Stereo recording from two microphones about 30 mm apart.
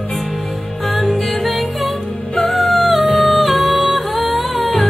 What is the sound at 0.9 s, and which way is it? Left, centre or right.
Music, centre.